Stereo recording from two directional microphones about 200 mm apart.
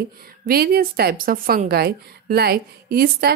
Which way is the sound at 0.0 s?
50° right (ahead or behind).